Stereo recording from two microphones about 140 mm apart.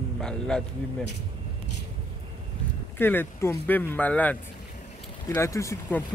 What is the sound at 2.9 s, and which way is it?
Speech, 15° left (ahead or behind).